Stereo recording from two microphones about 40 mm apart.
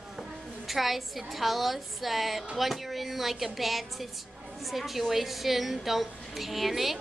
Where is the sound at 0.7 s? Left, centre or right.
Centre.